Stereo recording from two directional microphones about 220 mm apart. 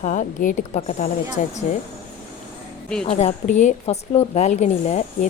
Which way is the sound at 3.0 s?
30° left (ahead or behind).